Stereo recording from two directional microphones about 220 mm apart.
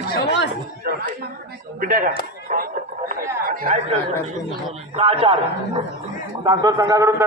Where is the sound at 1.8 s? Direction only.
40° right (ahead or behind).